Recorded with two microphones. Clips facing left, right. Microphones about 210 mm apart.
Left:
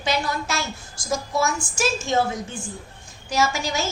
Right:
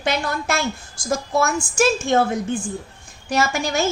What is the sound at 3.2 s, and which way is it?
Speech, 60° right (ahead or behind).